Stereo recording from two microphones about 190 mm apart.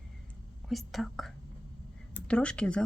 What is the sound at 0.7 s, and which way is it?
Speech, centre (ahead or behind).